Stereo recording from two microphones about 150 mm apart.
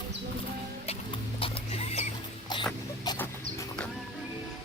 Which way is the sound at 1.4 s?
45° left (ahead or behind).